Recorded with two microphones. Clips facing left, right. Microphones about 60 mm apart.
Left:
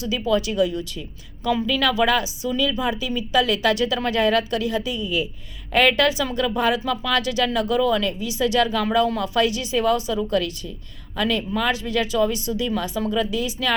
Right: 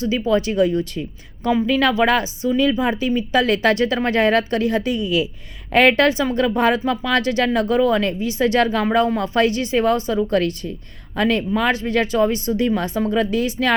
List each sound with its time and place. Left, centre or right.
0.0 s speech: right
5.7 s a woman's voice: right